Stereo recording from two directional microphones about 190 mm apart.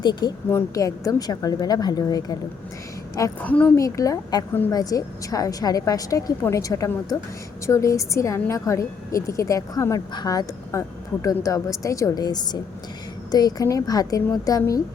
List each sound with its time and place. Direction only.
0.0 s a woman's voice: 20° left (ahead or behind)
3.8 s a woman's voice: 20° left (ahead or behind)